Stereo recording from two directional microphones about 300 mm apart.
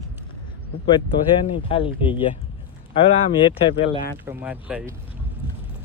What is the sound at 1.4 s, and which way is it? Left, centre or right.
Speech, centre.